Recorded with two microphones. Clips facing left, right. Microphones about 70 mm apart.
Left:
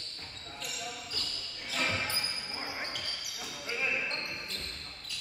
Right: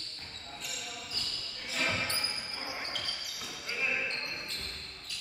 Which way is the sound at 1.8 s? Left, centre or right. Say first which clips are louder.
Even; centre.